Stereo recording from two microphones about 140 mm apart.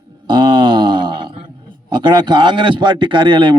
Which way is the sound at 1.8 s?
35° right (ahead or behind).